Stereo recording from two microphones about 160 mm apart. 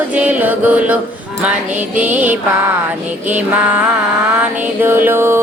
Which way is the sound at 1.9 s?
10° right (ahead or behind).